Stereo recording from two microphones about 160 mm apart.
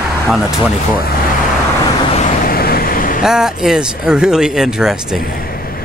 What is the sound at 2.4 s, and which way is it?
Vehicle, 70° left (ahead or behind).